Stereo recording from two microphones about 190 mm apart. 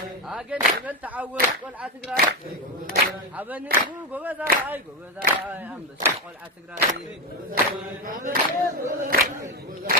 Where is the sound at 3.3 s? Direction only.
10° right (ahead or behind).